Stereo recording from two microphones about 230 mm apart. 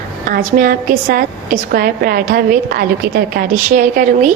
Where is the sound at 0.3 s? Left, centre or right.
Right.